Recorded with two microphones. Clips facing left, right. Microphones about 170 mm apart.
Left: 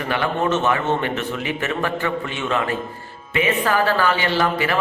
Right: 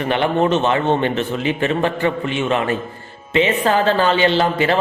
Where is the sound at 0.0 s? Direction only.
20° right (ahead or behind).